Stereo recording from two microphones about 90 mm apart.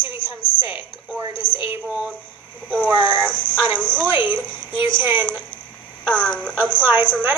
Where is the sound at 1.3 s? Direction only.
75° left (ahead or behind).